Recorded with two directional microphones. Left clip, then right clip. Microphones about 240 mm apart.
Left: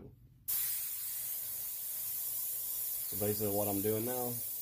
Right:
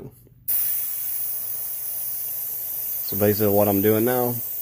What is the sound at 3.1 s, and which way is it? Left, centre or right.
Speech, right.